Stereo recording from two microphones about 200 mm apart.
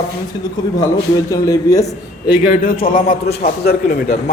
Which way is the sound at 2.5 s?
45° left (ahead or behind).